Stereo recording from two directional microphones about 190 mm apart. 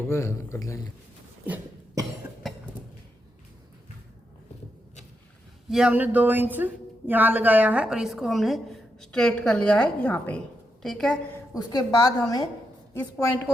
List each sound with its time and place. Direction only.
0.1 s speech: 15° left (ahead or behind)
1.5 s cough: 10° right (ahead or behind)
5.6 s a woman's voice: 5° right (ahead or behind)
11.5 s a woman's voice: 20° left (ahead or behind)